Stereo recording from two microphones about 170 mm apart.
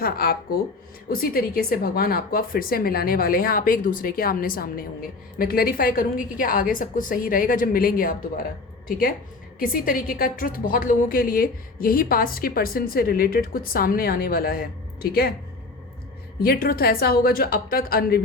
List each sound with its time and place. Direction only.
0.0 s a woman's voice: 65° left (ahead or behind)
16.4 s a woman's voice: 60° left (ahead or behind)